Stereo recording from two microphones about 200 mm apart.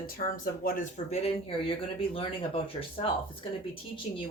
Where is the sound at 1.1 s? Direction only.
30° left (ahead or behind).